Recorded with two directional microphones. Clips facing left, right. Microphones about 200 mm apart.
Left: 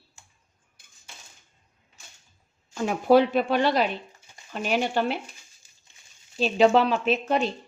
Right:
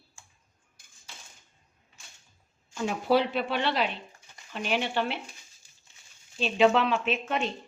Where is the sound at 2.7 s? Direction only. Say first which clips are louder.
Left 6 dB; 50° left (ahead or behind).